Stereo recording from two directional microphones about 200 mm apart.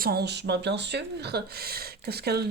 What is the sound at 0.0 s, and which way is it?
Speech, 50° right (ahead or behind).